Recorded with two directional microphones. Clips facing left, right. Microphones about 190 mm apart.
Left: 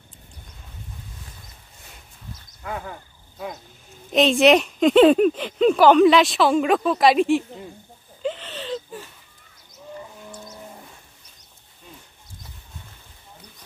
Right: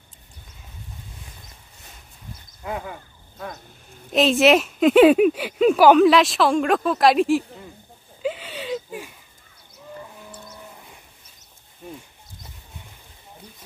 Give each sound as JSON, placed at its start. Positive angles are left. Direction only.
{"t": 2.6, "sound": "speech", "side_deg": -20}
{"t": 4.1, "sound": "speech", "side_deg": 0}
{"t": 8.2, "sound": "a sound", "side_deg": -5}